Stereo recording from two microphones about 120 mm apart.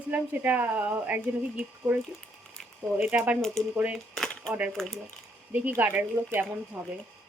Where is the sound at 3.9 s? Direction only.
5° left (ahead or behind).